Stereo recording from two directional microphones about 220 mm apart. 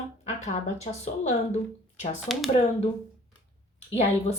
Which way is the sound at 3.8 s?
30° left (ahead or behind).